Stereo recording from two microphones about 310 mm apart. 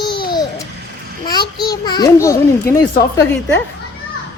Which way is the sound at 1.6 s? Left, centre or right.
Centre.